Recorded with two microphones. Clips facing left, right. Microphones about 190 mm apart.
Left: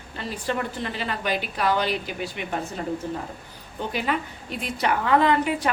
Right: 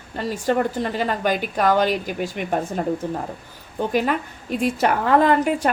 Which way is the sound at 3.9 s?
45° right (ahead or behind).